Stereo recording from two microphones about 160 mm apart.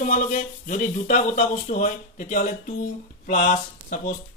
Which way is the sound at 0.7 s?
50° left (ahead or behind).